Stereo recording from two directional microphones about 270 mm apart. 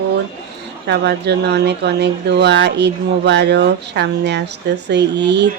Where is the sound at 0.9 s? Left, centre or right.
Right.